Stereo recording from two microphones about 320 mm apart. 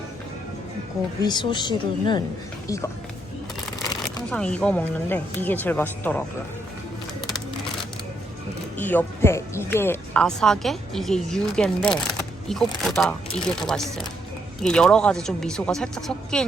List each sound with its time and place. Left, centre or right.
1.2 s speech: centre
8.8 s speech: centre